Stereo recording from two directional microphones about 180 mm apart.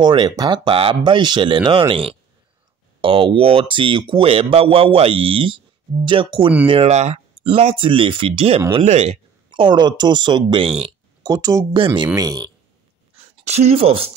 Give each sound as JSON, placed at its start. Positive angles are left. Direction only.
{"t": 0.0, "sound": "speech", "side_deg": -25}
{"t": 13.4, "sound": "speech", "side_deg": -35}